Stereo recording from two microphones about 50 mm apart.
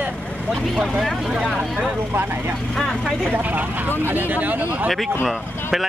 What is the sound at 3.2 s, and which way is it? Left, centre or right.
Speech, right.